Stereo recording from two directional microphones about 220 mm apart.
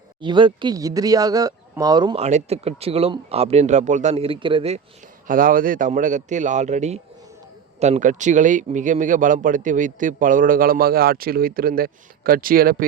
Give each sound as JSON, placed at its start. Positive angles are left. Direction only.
{"t": 0.2, "sound": "speech", "side_deg": -20}
{"t": 5.3, "sound": "speech", "side_deg": -40}